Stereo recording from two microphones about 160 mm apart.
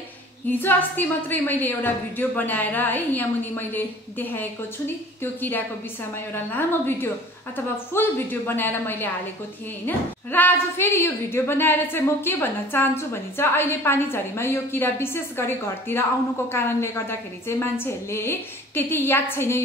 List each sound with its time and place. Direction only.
0.5 s a woman's voice: 15° left (ahead or behind)